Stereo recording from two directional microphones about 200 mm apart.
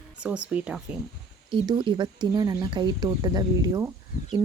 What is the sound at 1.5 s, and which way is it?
Speech, 25° right (ahead or behind).